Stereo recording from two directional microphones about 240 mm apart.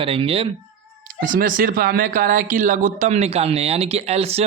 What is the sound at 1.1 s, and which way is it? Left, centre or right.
Speech, right.